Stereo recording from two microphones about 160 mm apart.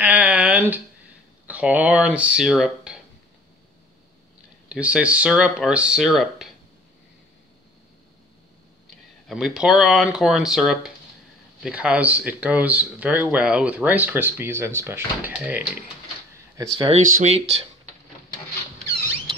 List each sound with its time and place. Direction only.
0.0 s a sound: 10° right (ahead or behind)
1.5 s speech: 10° right (ahead or behind)
4.6 s speech: 10° right (ahead or behind)
9.3 s speech: 5° right (ahead or behind)
16.5 s speech: 25° right (ahead or behind)
16.9 s speech: 40° right (ahead or behind)